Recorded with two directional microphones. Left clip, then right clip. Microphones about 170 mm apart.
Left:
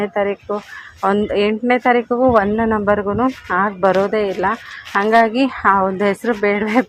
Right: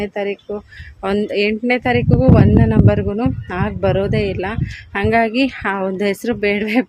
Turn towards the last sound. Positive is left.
turn(degrees=-20)  # may be behind; listen again after turning